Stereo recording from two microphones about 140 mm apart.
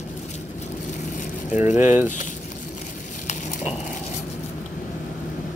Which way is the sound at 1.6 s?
65° left (ahead or behind).